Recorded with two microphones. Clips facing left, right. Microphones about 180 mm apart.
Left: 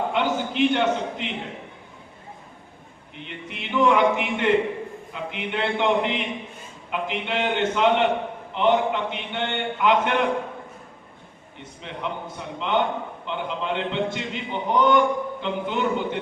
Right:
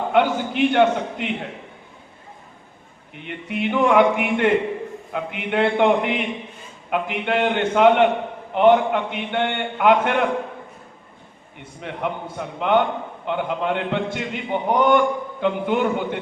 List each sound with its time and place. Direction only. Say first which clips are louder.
0.1 s a man's voice: right 5 dB; 55° right (ahead or behind)
3.2 s a man's voice: right 10 dB; 55° right (ahead or behind)
11.8 s a man's voice: right 4 dB; 55° right (ahead or behind)